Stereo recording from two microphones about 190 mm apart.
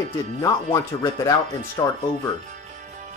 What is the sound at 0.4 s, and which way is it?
Speech, 15° left (ahead or behind).